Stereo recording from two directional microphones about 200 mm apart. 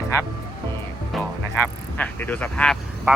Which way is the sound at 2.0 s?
10° left (ahead or behind).